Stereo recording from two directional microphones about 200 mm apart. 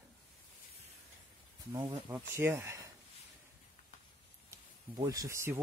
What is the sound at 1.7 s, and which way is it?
Speech, 20° right (ahead or behind).